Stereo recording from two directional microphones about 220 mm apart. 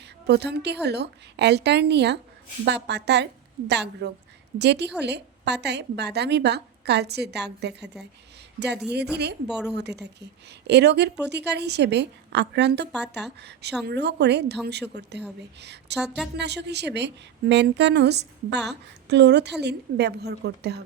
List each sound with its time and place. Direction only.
0.0 s a woman's voice: 50° right (ahead or behind)
9.5 s speech: 5° right (ahead or behind)
9.7 s a woman's voice: 50° right (ahead or behind)
16.0 s speech: 5° right (ahead or behind)
16.4 s a woman's voice: 50° right (ahead or behind)